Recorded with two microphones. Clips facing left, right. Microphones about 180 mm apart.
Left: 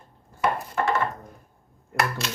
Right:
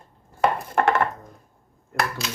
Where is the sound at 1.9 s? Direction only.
Centre (ahead or behind).